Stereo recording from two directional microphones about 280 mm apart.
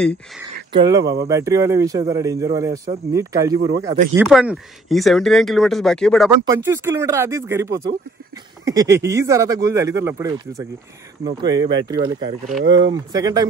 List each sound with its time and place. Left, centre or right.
0.7 s speech: centre
6.4 s speech: centre